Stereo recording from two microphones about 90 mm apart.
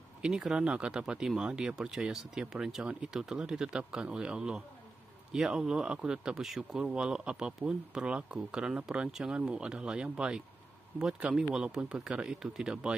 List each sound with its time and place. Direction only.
0.2 s speech: 5° right (ahead or behind)